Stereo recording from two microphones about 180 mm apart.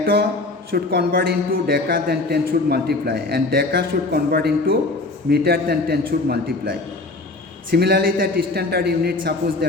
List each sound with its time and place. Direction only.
0.0 s a man's voice: 60° right (ahead or behind)